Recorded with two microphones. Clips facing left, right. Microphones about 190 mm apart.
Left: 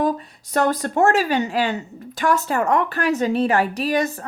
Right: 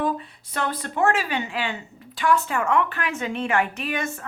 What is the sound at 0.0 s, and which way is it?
Speech, 40° left (ahead or behind).